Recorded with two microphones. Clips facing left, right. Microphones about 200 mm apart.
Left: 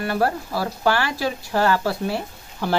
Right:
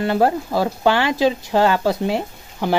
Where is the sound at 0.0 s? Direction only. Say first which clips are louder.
Right 5 dB; 20° right (ahead or behind).